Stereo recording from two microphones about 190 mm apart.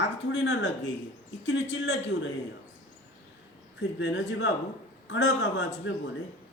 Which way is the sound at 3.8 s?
70° left (ahead or behind).